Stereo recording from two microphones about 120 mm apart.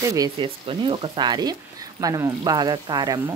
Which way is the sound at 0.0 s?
30° right (ahead or behind).